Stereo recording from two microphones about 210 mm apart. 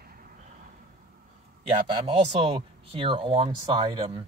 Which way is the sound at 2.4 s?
25° right (ahead or behind).